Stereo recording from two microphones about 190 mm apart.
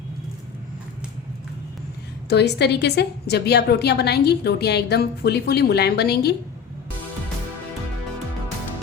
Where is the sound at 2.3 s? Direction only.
60° left (ahead or behind).